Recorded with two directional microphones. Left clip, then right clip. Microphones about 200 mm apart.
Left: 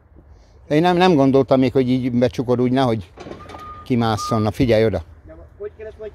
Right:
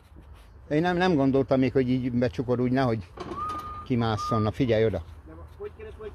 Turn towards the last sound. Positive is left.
turn(degrees=35)  # may be behind; listen again after turning